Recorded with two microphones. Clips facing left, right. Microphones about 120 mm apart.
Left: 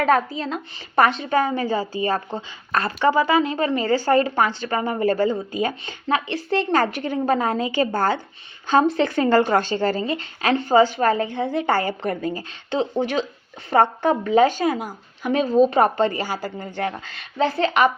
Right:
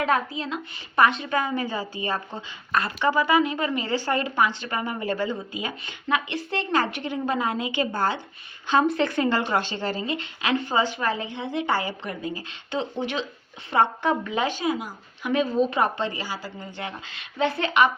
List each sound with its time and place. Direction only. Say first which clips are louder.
0.0 s a woman's voice: left 5 dB; 40° left (ahead or behind)